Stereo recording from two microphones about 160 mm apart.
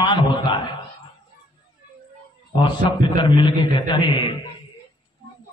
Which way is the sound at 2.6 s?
30° left (ahead or behind).